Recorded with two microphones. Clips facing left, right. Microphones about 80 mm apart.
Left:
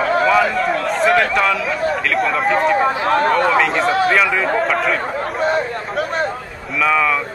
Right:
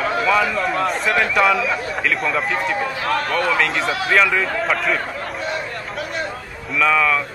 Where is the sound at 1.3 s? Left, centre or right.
Centre.